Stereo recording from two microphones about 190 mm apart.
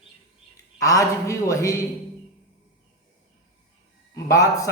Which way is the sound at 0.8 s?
15° left (ahead or behind).